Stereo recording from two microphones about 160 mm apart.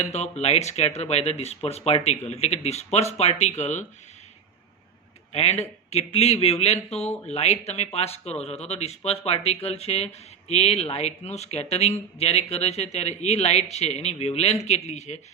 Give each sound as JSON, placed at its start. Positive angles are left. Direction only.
{"t": 0.0, "sound": "speech", "side_deg": 45}
{"t": 5.3, "sound": "speech", "side_deg": 40}